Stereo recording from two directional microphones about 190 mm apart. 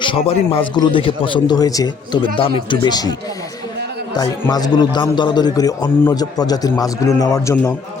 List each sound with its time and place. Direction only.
0.0 s a man's voice: 25° left (ahead or behind)